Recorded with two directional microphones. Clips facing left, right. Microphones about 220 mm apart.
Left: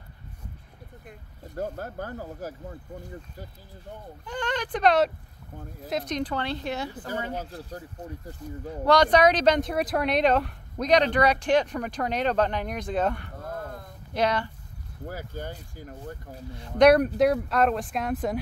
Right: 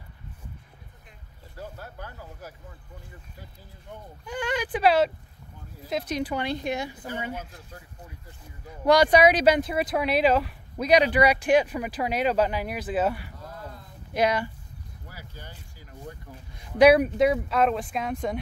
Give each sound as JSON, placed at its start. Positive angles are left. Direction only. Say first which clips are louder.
{"t": 1.0, "sound": "speech", "louder": "left 8 dB", "side_deg": 50}
{"t": 4.3, "sound": "speech", "louder": "right 1 dB", "side_deg": -10}
{"t": 7.3, "sound": "speech", "louder": "left 5 dB", "side_deg": 35}
{"t": 8.8, "sound": "speech", "louder": "right 1 dB", "side_deg": -10}
{"t": 13.4, "sound": "a sound", "louder": "left 5 dB", "side_deg": 50}
{"t": 14.1, "sound": "speech", "louder": "right 1 dB", "side_deg": -10}
{"t": 15.0, "sound": "speech", "louder": "left 11 dB", "side_deg": 50}
{"t": 16.5, "sound": "speech", "louder": "right 1 dB", "side_deg": -10}